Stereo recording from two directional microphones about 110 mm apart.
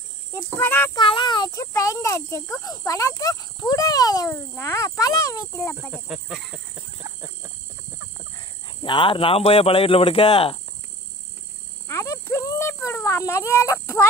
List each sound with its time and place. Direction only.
0.6 s speech: 20° left (ahead or behind)
0.9 s speech: 45° left (ahead or behind)
4.3 s speech: 25° left (ahead or behind)
5.9 s speech: 5° right (ahead or behind)
8.4 s speech: 45° left (ahead or behind)
11.9 s a sound: 25° left (ahead or behind)